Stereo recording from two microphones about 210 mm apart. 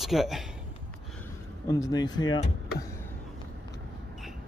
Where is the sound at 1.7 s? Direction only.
20° left (ahead or behind).